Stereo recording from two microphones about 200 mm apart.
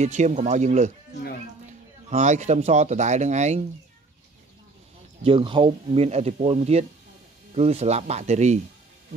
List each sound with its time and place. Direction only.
0.0 s speech: 35° right (ahead or behind)
5.2 s speech: 25° right (ahead or behind)